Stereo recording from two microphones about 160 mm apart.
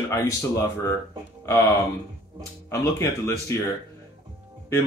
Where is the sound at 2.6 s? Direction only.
15° left (ahead or behind).